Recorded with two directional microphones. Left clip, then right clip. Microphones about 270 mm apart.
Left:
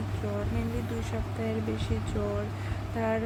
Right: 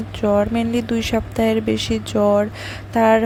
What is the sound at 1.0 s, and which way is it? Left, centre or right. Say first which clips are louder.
Speech: right 15 dB; right.